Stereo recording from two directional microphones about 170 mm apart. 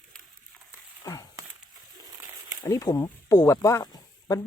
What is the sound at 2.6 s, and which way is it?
Speech, 20° left (ahead or behind).